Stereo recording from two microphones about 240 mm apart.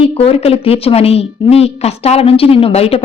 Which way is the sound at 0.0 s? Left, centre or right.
Left.